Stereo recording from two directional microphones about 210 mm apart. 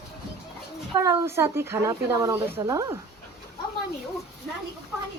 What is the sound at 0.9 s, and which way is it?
Speech, 15° right (ahead or behind).